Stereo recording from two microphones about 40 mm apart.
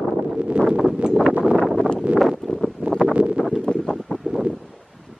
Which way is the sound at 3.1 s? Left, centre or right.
Right.